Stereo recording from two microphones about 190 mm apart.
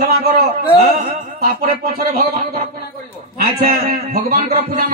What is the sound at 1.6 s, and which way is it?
Speech, 50° right (ahead or behind).